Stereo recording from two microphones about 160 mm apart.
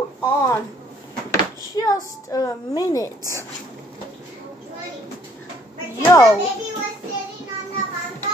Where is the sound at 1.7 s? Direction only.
25° left (ahead or behind).